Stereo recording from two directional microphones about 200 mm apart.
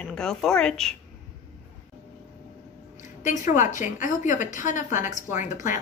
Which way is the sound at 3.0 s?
40° left (ahead or behind).